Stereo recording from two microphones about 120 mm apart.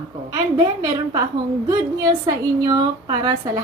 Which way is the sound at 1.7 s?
30° right (ahead or behind).